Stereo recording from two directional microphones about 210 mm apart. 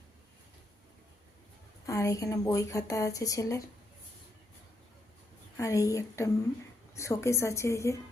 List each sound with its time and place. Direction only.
1.9 s speech: 15° left (ahead or behind)
5.5 s speech: 15° left (ahead or behind)